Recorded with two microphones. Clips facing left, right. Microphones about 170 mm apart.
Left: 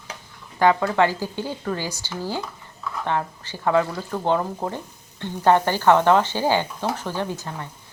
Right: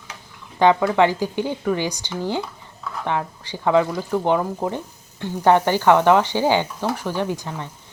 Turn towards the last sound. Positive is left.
turn(degrees=-15)  # may be behind; listen again after turning